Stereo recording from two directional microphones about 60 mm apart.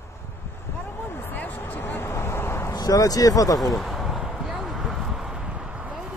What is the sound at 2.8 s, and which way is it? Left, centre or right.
Speech, left.